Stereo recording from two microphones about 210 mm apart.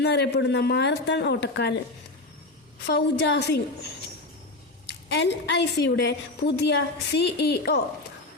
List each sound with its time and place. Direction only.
0.0 s speech: 55° left (ahead or behind)
2.8 s speech: 55° left (ahead or behind)
5.0 s a woman's voice: 55° left (ahead or behind)